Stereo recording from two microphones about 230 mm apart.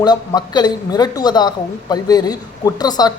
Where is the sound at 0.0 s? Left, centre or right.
Centre.